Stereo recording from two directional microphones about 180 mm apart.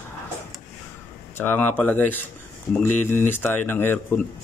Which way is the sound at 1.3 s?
10° left (ahead or behind).